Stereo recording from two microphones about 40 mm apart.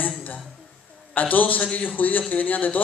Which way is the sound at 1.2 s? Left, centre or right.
Left.